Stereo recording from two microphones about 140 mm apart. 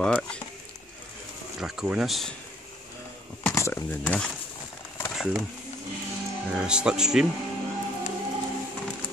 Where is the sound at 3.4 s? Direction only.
20° left (ahead or behind).